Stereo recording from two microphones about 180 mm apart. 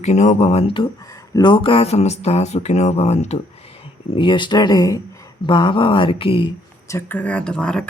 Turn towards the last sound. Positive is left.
turn(degrees=5)  # may be behind; listen again after turning